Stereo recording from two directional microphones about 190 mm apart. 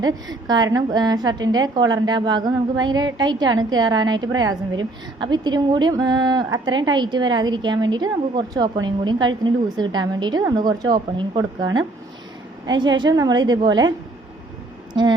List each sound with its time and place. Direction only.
0.0 s a woman's voice: 20° right (ahead or behind)
15.0 s a woman's voice: 25° right (ahead or behind)